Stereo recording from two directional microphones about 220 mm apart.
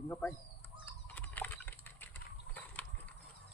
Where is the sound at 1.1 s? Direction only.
10° left (ahead or behind).